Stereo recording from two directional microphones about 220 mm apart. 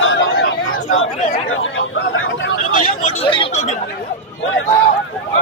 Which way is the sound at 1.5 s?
60° left (ahead or behind).